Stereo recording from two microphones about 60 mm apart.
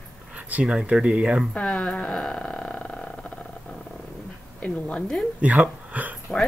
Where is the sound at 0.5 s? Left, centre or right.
Right.